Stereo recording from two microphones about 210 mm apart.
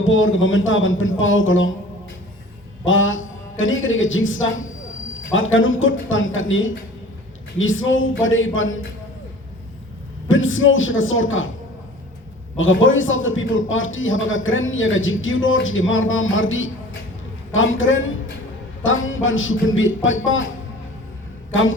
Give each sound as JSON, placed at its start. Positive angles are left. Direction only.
{"t": 0.0, "sound": "a man's voice", "side_deg": 70}
{"t": 2.8, "sound": "a man's voice", "side_deg": 70}
{"t": 10.2, "sound": "a woman's voice", "side_deg": 70}
{"t": 12.5, "sound": "a man's voice", "side_deg": 70}
{"t": 21.5, "sound": "speech", "side_deg": 70}